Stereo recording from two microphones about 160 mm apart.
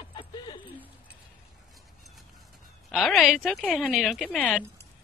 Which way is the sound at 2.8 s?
Centre (ahead or behind).